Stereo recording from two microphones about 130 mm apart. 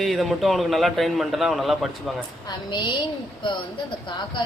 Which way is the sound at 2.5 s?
35° left (ahead or behind).